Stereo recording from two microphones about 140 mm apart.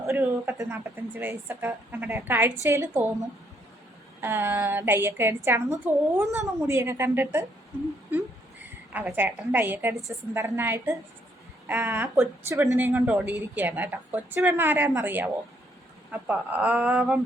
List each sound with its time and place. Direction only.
0.1 s a woman's voice: 15° right (ahead or behind)
8.9 s a woman's voice: 10° right (ahead or behind)